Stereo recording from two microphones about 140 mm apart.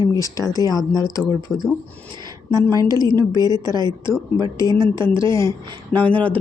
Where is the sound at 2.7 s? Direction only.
25° right (ahead or behind).